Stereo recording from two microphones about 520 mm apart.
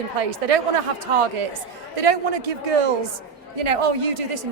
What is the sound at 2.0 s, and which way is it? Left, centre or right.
A man's voice, right.